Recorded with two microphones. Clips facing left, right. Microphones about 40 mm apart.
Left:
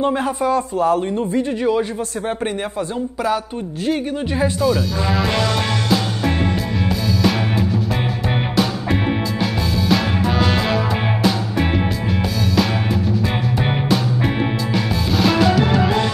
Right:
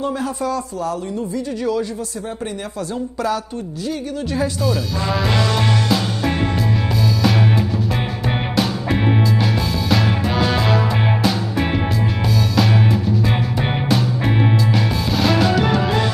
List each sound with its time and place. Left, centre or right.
0.0 s speech: left
4.6 s speech: centre
5.9 s music: centre
9.8 s music: centre
13.6 s music: centre